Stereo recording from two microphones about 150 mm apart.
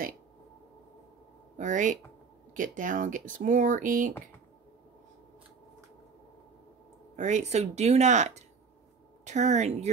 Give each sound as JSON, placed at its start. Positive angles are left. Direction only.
{"t": 1.6, "sound": "speech", "side_deg": -55}
{"t": 7.2, "sound": "speech", "side_deg": -50}